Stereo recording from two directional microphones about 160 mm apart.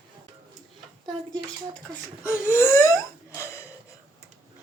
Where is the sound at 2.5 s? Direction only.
15° left (ahead or behind).